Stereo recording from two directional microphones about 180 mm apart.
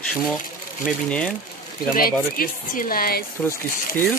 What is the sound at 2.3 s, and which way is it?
Speech, 50° left (ahead or behind).